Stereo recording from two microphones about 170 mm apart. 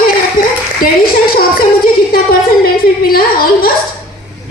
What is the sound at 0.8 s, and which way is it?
A woman's voice, 60° left (ahead or behind).